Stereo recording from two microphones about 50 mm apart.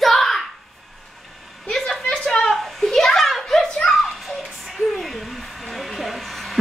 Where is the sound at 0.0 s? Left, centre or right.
Centre.